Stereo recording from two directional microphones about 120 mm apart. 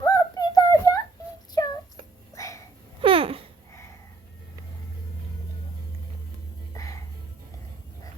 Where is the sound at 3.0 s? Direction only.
50° right (ahead or behind).